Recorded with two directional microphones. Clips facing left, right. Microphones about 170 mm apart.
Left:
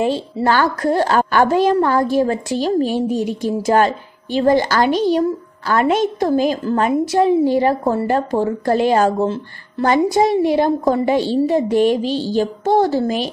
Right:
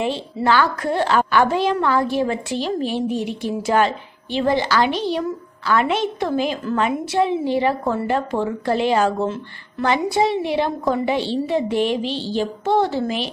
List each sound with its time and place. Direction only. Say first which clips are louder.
0.0 s a woman's voice: left 4 dB; 40° left (ahead or behind)